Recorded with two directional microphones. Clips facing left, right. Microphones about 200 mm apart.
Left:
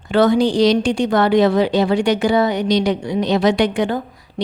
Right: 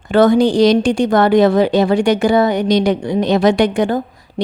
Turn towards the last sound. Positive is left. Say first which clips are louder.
# right 3 dB
turn(degrees=-45)  # may be behind; listen again after turning